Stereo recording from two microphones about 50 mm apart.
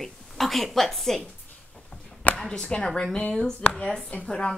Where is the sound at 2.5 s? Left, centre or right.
Centre.